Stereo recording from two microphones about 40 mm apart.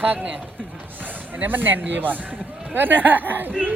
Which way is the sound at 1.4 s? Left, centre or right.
Right.